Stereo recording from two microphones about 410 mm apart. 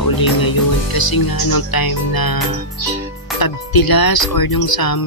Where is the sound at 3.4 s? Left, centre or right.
Left.